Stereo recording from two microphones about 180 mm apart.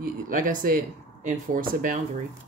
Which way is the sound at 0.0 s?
45° right (ahead or behind).